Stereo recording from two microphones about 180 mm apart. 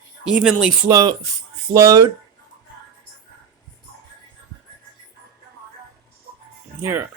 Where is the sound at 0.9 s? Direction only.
20° right (ahead or behind).